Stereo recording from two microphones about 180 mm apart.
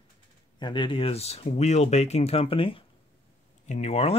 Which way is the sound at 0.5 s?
25° left (ahead or behind).